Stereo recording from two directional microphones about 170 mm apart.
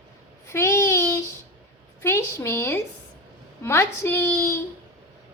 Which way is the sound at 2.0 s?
15° left (ahead or behind).